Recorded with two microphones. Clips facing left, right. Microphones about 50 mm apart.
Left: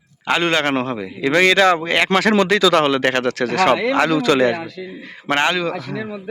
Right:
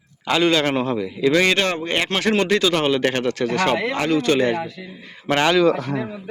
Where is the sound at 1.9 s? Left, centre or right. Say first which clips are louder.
Left 5 dB; left.